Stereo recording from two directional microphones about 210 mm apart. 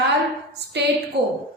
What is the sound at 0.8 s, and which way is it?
Speech, 55° right (ahead or behind).